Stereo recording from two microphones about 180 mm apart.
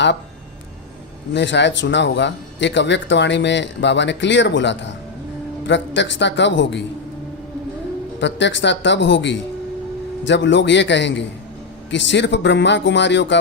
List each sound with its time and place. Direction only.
1.3 s a man's voice: 75° left (ahead or behind)
8.2 s a man's voice: 80° left